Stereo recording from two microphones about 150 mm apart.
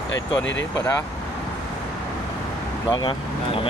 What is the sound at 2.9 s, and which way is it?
Speech, 35° left (ahead or behind).